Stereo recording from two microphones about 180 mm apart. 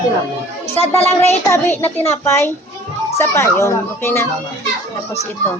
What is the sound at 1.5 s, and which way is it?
A child's voice, 10° left (ahead or behind).